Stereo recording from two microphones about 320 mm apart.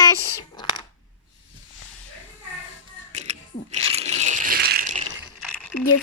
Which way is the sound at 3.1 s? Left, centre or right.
Right.